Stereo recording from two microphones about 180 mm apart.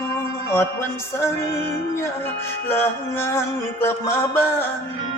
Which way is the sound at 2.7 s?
10° left (ahead or behind).